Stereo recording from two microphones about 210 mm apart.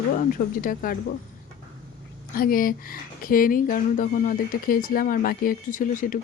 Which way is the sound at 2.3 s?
45° left (ahead or behind).